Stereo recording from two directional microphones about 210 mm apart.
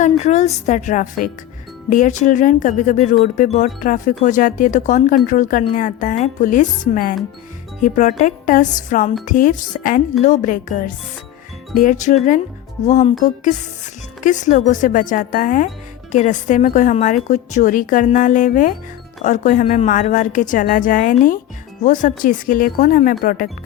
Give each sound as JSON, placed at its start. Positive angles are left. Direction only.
{"t": 0.0, "sound": "a woman's voice", "side_deg": 35}